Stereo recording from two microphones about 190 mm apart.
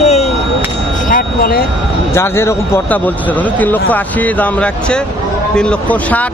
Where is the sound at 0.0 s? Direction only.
35° left (ahead or behind).